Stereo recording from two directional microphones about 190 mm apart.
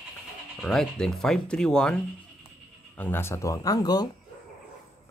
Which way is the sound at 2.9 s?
10° left (ahead or behind).